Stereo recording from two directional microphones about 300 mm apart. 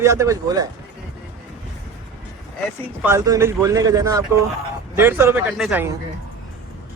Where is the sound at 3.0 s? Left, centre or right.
Centre.